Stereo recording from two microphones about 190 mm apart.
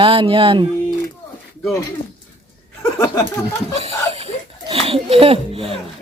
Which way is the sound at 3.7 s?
35° right (ahead or behind).